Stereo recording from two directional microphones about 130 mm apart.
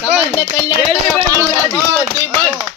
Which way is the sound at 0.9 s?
20° left (ahead or behind).